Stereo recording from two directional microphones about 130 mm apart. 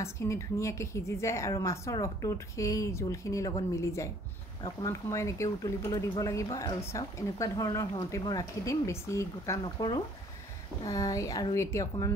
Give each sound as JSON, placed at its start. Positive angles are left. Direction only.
{"t": 0.0, "sound": "speech", "side_deg": 20}